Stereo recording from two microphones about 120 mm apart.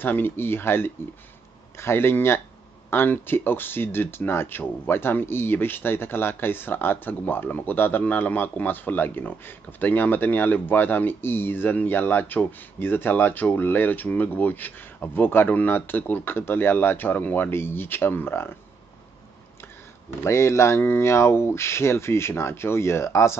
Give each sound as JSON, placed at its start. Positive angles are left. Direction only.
{"t": 0.0, "sound": "speech", "side_deg": 15}
{"t": 20.2, "sound": "speech", "side_deg": 25}